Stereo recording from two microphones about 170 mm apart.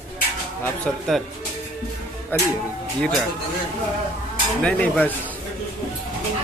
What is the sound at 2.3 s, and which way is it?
Speech, 10° left (ahead or behind).